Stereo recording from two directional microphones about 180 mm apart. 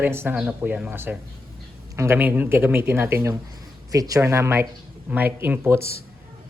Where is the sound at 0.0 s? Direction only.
10° right (ahead or behind).